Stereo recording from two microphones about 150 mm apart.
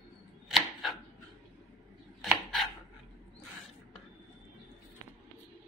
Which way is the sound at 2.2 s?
Centre (ahead or behind).